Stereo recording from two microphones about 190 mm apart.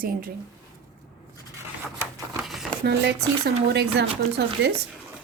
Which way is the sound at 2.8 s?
60° right (ahead or behind).